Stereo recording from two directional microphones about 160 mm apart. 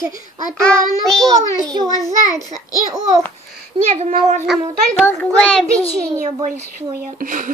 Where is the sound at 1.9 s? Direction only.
25° left (ahead or behind).